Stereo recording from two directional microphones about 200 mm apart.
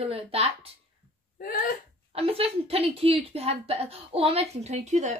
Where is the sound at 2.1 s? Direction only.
30° right (ahead or behind).